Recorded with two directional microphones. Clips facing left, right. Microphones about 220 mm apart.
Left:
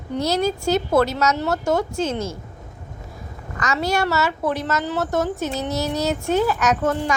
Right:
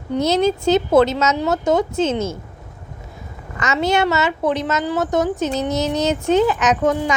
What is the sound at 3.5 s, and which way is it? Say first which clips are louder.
A woman's voice: right 4 dB; 25° right (ahead or behind).